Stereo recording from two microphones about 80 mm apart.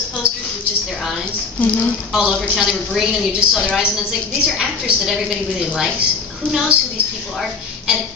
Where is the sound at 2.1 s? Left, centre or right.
Centre.